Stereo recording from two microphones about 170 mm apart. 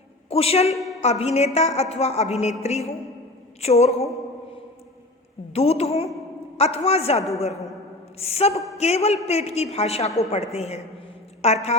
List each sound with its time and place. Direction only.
0.3 s a woman's voice: 35° left (ahead or behind)
5.5 s a woman's voice: 35° left (ahead or behind)